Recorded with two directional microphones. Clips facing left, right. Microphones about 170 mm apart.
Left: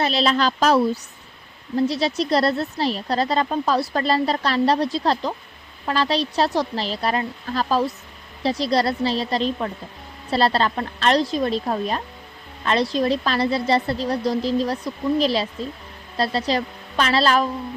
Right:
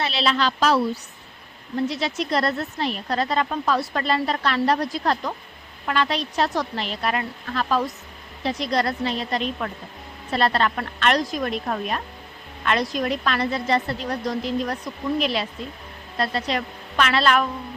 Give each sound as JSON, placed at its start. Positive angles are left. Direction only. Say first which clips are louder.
{"t": 0.0, "sound": "a woman's voice", "louder": "left 3 dB", "side_deg": 40}